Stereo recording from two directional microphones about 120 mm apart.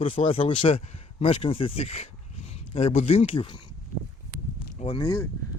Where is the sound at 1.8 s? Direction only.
65° left (ahead or behind); by 3.6 s 45° left (ahead or behind).